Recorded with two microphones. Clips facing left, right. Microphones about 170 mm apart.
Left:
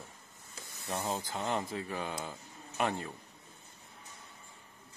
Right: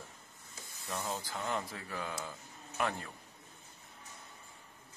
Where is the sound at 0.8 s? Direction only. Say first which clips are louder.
Left 3 dB; 20° left (ahead or behind).